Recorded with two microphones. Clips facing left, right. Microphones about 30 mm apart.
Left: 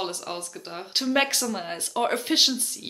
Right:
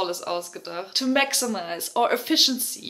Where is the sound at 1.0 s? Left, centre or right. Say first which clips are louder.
Right 1 dB; centre.